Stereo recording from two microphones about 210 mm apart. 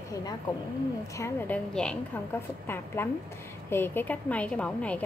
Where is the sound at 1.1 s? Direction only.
10° left (ahead or behind).